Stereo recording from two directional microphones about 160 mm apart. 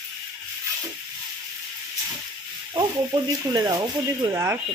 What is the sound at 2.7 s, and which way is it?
Speech, 25° right (ahead or behind).